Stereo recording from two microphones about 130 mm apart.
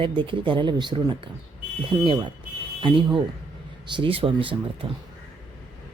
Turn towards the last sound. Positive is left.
turn(degrees=-45)  # may be behind; listen again after turning